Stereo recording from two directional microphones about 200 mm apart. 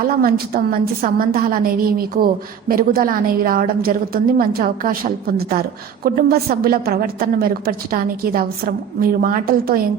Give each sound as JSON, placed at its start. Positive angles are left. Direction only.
{"t": 0.2, "sound": "a woman's voice", "side_deg": -50}